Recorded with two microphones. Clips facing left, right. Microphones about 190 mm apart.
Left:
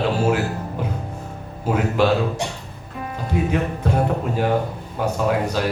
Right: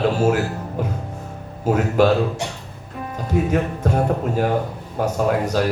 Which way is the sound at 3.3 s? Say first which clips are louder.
Right 2 dB; 45° right (ahead or behind).